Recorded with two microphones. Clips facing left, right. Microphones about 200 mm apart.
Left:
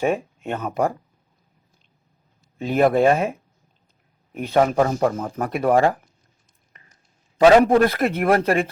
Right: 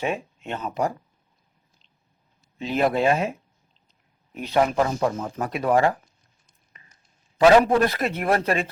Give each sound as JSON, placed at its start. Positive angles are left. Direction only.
{"t": 0.0, "sound": "speech", "side_deg": 45}
{"t": 2.6, "sound": "speech", "side_deg": 50}
{"t": 4.4, "sound": "speech", "side_deg": 45}
{"t": 7.6, "sound": "speech", "side_deg": 50}